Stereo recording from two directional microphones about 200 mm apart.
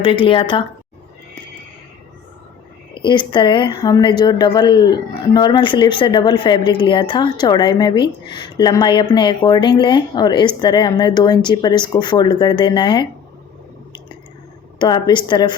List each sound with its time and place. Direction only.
0.0 s a woman's voice: 25° left (ahead or behind)
2.9 s a woman's voice: 25° left (ahead or behind)
14.8 s a woman's voice: 20° left (ahead or behind)